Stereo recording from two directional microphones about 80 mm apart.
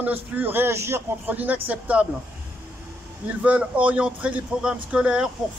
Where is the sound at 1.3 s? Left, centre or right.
Right.